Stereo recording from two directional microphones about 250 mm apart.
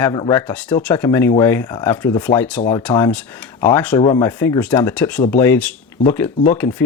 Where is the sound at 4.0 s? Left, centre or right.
Centre.